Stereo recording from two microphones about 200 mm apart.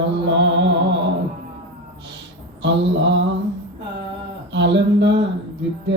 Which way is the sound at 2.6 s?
65° right (ahead or behind).